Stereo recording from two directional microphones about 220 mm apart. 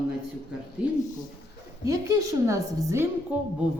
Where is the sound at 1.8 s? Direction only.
15° right (ahead or behind).